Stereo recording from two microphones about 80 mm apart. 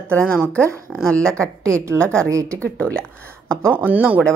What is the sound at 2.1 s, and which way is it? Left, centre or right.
Speech, right.